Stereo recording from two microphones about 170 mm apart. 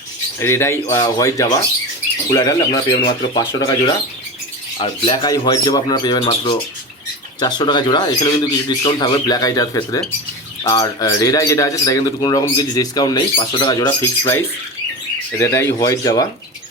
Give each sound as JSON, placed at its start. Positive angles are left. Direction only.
{"t": 0.3, "sound": "a man's voice", "side_deg": 15}